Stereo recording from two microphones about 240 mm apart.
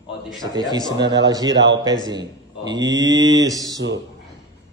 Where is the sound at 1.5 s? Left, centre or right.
Right.